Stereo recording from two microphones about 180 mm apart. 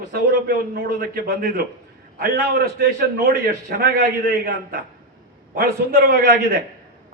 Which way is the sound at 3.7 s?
55° right (ahead or behind).